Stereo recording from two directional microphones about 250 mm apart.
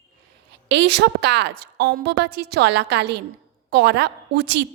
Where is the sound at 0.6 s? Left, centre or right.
Right.